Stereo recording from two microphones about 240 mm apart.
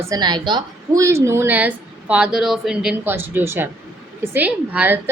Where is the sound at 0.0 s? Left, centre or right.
Centre.